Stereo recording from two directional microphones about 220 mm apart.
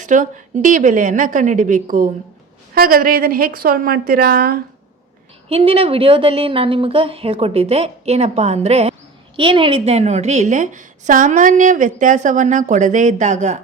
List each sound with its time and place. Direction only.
0.0 s a woman's voice: 35° right (ahead or behind)
5.5 s a woman's voice: 25° right (ahead or behind)